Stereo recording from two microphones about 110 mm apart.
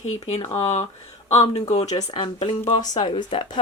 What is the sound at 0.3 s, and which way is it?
Speech, 85° left.